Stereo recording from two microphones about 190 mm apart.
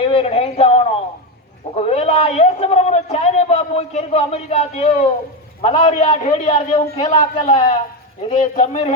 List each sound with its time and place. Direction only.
0.0 s a man's voice: 30° left (ahead or behind)